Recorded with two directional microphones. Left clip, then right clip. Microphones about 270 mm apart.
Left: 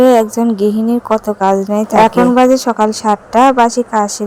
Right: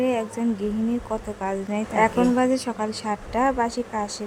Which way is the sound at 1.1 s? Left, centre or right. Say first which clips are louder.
Left 16 dB; left.